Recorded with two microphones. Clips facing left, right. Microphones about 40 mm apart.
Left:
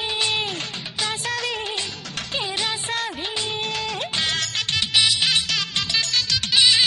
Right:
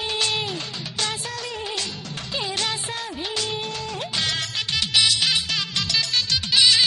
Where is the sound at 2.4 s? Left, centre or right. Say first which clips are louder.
Even; centre.